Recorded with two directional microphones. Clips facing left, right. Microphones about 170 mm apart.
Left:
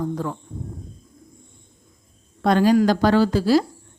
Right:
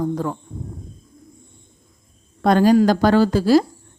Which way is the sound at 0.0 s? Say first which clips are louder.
Right 3 dB; 40° right (ahead or behind).